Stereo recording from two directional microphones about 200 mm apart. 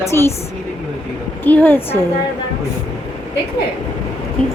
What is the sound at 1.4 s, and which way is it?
Speech, 10° left (ahead or behind).